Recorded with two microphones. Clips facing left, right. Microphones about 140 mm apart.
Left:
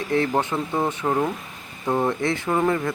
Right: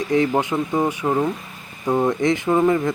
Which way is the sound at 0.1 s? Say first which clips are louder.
Right 3 dB; 15° right (ahead or behind).